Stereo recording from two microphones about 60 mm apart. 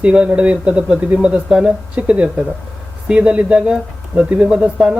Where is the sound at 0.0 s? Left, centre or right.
Centre.